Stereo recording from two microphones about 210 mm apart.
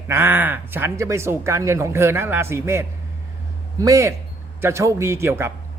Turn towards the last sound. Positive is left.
turn(degrees=-10)  # may be behind; listen again after turning